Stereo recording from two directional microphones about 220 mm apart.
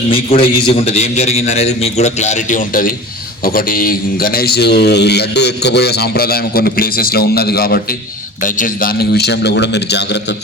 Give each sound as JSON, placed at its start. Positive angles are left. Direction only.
{"t": 0.1, "sound": "a man's voice", "side_deg": 25}